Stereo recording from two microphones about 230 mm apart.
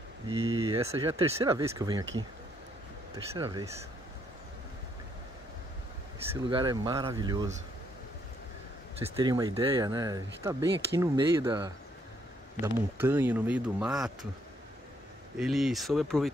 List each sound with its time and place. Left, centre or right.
0.3 s speech: centre
3.3 s speech: centre
6.4 s speech: centre
9.0 s speech: centre
15.3 s speech: centre